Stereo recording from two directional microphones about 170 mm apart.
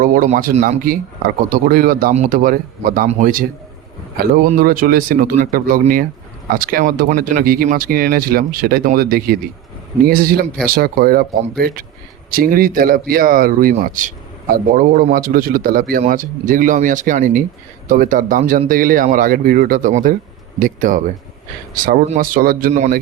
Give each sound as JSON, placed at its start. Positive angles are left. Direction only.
{"t": 0.0, "sound": "a man's voice", "side_deg": -50}
{"t": 22.1, "sound": "speech", "side_deg": -55}